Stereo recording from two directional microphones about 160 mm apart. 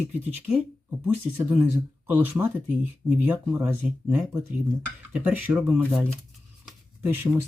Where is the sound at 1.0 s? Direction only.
10° right (ahead or behind).